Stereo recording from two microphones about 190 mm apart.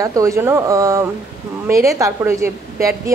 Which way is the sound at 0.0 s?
15° right (ahead or behind).